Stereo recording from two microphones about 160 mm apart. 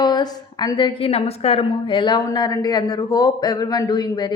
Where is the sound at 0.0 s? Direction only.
25° left (ahead or behind).